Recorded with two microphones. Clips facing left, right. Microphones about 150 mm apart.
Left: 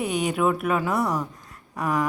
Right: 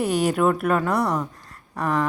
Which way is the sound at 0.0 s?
Centre (ahead or behind).